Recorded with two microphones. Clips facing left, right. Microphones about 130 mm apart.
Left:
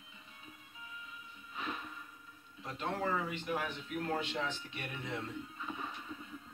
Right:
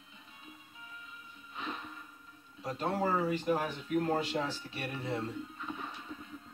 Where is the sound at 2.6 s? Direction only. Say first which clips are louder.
Right 4 dB; 35° right (ahead or behind).